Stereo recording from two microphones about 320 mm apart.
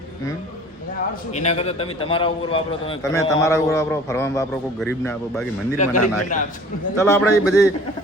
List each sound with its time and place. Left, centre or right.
1.4 s a man's voice: left; by 5.5 s centre
5.7 s a man's voice: left
6.9 s a man's voice: centre